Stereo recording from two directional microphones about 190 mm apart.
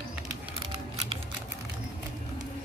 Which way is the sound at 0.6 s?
30° right (ahead or behind).